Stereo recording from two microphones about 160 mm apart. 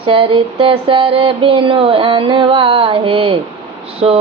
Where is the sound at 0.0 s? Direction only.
35° right (ahead or behind).